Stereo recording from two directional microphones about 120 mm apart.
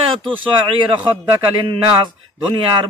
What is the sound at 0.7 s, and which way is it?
A man's voice, 45° right (ahead or behind).